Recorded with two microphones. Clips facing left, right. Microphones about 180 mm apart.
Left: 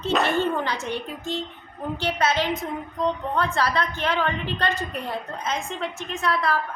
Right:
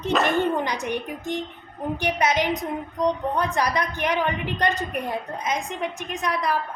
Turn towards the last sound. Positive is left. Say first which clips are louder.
# left 1 dB
turn(degrees=-15)  # may be behind; listen again after turning